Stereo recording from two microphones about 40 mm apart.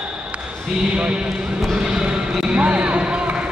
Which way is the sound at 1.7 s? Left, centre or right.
Centre.